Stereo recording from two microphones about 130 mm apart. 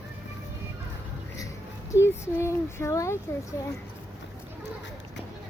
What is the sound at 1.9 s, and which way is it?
Speech, 20° left (ahead or behind).